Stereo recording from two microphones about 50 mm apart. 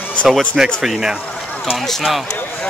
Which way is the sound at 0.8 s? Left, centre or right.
Centre.